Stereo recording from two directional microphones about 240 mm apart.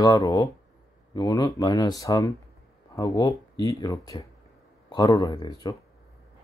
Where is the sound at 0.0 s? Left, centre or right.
Centre.